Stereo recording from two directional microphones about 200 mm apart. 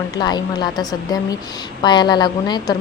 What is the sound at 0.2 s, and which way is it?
Speech, 20° left (ahead or behind).